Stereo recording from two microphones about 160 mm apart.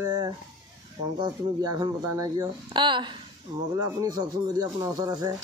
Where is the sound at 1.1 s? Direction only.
30° right (ahead or behind).